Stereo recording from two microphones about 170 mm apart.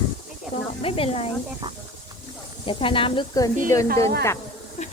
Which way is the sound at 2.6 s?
30° left (ahead or behind).